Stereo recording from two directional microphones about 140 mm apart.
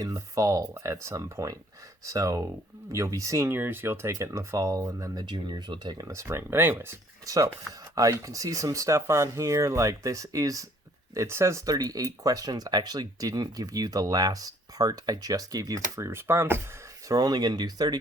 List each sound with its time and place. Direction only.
0.0 s speech: 25° right (ahead or behind)
17.1 s speech: 25° right (ahead or behind)